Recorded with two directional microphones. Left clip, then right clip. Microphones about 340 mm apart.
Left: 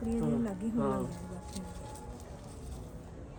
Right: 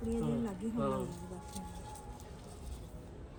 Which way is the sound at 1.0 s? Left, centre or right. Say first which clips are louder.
Left 2 dB; centre.